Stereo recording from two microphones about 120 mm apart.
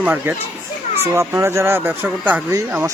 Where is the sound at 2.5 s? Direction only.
30° right (ahead or behind).